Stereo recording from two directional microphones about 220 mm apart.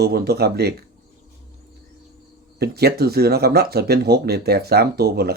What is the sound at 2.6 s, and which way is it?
Speech, 45° right (ahead or behind).